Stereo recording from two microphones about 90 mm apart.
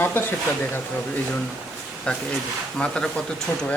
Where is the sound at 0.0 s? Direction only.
25° left (ahead or behind).